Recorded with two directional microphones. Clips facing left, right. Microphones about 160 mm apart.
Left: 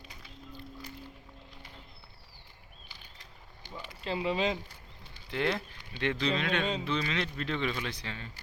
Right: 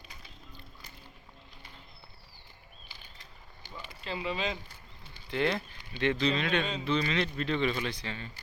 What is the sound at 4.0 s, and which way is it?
Speech, 30° left (ahead or behind).